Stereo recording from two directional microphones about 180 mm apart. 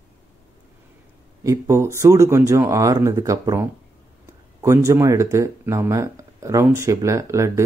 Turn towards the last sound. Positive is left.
turn(degrees=-15)  # may be behind; listen again after turning